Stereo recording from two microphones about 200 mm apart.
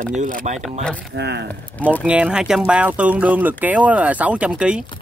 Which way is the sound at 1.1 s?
55° right (ahead or behind).